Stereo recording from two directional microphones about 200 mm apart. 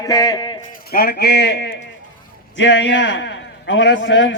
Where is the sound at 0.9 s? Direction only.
50° left (ahead or behind).